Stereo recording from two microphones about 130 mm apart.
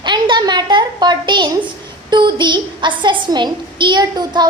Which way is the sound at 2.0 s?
35° right (ahead or behind).